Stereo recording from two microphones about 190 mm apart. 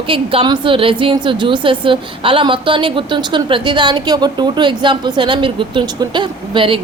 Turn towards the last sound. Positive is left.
turn(degrees=-25)  # may be behind; listen again after turning